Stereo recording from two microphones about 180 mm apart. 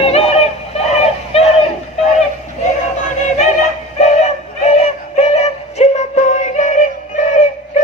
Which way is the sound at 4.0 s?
40° left (ahead or behind).